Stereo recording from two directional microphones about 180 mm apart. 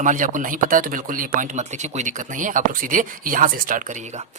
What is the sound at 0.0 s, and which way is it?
Speech, 45° right (ahead or behind).